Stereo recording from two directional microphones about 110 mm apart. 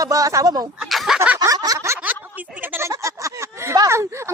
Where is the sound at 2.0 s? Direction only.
15° right (ahead or behind).